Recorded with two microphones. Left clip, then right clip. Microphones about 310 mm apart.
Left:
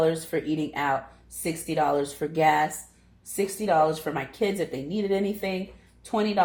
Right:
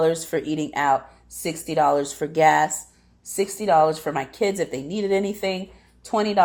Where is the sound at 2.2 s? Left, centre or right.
Right.